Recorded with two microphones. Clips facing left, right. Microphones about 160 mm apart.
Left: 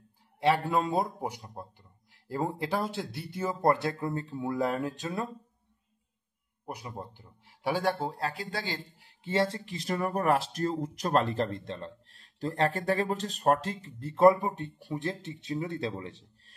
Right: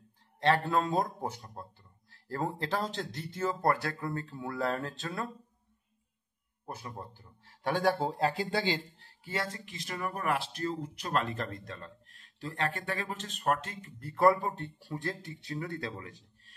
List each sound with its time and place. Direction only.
0.4 s a man's voice: 10° left (ahead or behind)
6.6 s a man's voice: 15° left (ahead or behind)
8.2 s speech: 30° right (ahead or behind)
9.2 s speech: 30° left (ahead or behind)